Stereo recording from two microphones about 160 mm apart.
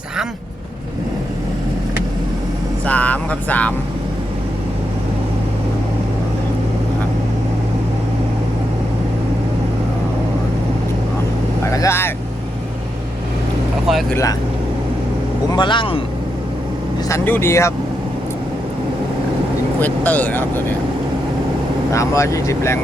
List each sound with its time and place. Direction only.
2.8 s speech: 10° left (ahead or behind)
11.6 s vehicle: 20° left (ahead or behind)
15.5 s speech: 30° left (ahead or behind)
17.1 s speech: 15° left (ahead or behind)
19.8 s speech: 10° left (ahead or behind)
21.9 s speech: 20° left (ahead or behind)